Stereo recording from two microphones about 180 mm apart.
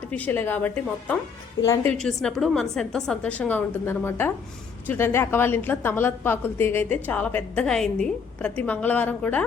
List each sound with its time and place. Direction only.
0.1 s a woman's voice: 10° left (ahead or behind)
2.0 s a woman's voice: 5° left (ahead or behind)